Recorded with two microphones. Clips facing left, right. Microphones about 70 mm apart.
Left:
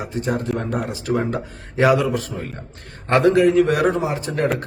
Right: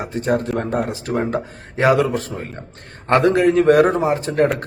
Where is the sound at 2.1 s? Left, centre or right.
Right.